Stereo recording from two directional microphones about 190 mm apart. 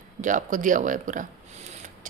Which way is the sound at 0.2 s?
40° right (ahead or behind).